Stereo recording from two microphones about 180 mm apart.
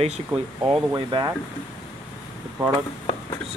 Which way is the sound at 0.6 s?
25° right (ahead or behind).